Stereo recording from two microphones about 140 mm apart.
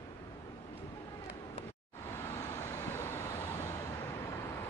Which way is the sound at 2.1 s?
20° left (ahead or behind).